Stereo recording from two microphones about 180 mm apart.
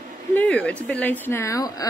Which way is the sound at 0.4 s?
5° left (ahead or behind).